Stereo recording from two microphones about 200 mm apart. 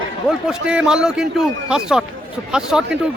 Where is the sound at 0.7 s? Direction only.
5° right (ahead or behind).